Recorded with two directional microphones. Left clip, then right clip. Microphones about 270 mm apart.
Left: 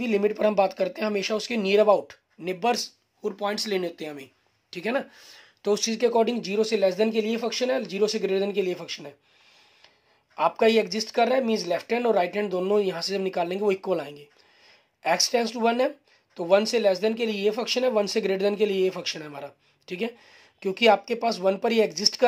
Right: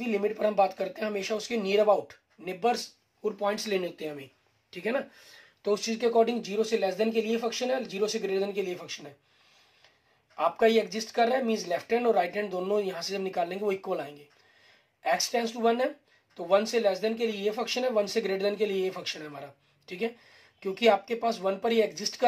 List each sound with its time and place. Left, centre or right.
0.0 s speech: left
10.3 s speech: left